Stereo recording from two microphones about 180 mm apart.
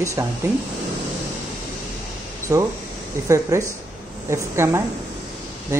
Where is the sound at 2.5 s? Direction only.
20° right (ahead or behind).